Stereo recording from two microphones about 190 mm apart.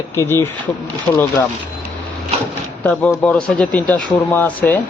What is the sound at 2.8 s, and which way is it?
Speech, 10° left (ahead or behind).